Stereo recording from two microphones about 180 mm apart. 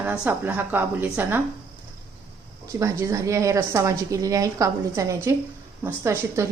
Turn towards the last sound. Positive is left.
turn(degrees=-15)  # may be behind; listen again after turning